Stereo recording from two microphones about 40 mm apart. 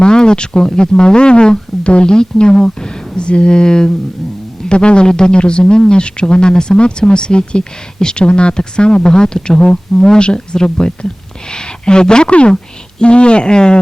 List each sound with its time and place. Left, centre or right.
0.0 s a man's voice: centre